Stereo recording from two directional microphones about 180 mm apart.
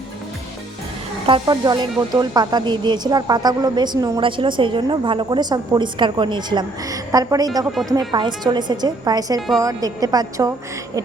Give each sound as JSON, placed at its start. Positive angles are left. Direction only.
{"t": 1.3, "sound": "speech", "side_deg": -25}